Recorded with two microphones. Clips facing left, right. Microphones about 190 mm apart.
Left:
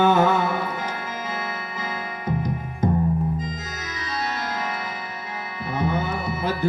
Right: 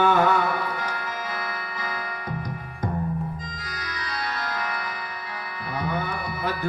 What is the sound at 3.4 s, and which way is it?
Organ, 25° left (ahead or behind).